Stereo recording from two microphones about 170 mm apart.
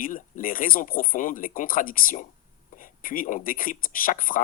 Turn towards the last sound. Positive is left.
turn(degrees=55)  # may be behind; listen again after turning